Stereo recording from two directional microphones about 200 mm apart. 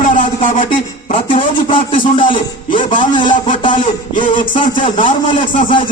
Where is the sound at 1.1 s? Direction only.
25° left (ahead or behind).